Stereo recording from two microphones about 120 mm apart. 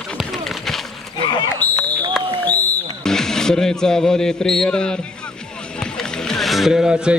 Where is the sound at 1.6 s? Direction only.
15° left (ahead or behind).